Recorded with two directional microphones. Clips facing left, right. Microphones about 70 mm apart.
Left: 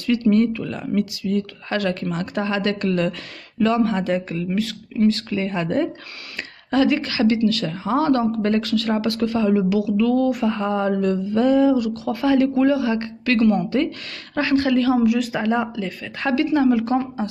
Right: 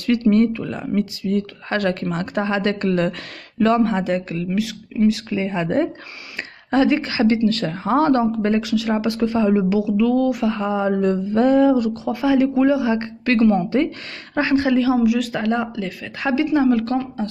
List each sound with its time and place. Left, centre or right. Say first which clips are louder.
0.0 s speech: right 1 dB; right
0.7 s speech: right 1 dB; right
1.2 s speech: right 1 dB; right
4.0 s speech: even; centre; by 8.1 s right
8.4 s speech: right 1 dB; centre
9.9 s speech: right 1 dB; centre
11.0 s speech: right 2 dB; right
11.9 s speech: right 1 dB; right
12.2 s speech: right 1 dB; centre
15.0 s speech: even; centre
15.7 s speech: even; centre
16.7 s a woman's voice: even; centre